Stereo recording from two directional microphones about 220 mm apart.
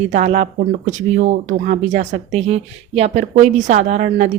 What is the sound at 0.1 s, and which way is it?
Speech, 30° right (ahead or behind).